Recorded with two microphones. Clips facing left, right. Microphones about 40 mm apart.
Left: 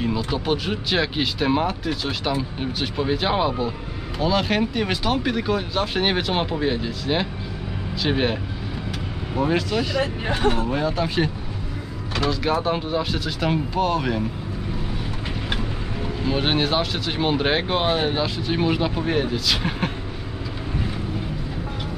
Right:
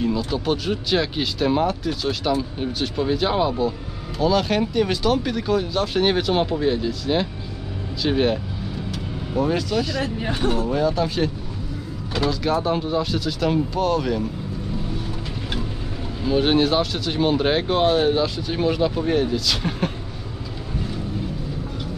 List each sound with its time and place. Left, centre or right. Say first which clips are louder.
0.0 s speech: right 1 dB; centre
16.3 s speech: right 4 dB; centre